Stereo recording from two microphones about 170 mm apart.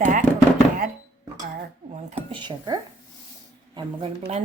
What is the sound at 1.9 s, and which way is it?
Speech, 40° right (ahead or behind).